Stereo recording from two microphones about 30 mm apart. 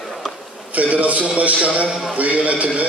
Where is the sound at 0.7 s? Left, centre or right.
Right.